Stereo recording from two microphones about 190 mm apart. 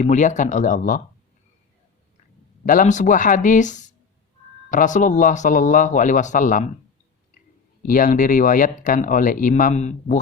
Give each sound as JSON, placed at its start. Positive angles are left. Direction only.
{"t": 0.0, "sound": "speech", "side_deg": 40}
{"t": 2.6, "sound": "speech", "side_deg": 45}
{"t": 7.8, "sound": "speech", "side_deg": 45}